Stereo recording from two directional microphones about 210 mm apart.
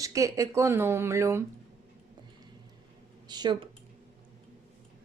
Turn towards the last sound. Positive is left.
turn(degrees=-20)  # may be behind; listen again after turning